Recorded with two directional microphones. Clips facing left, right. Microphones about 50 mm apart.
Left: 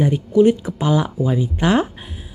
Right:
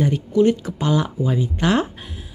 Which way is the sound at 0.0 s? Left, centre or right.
Left.